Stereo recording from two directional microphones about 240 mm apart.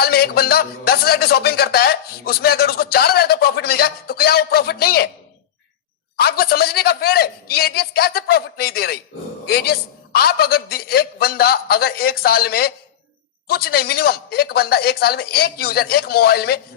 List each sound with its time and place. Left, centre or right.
0.0 s speech: left
6.1 s speech: left